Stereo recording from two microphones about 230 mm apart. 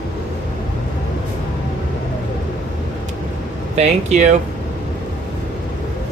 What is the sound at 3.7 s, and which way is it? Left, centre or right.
Speech, right.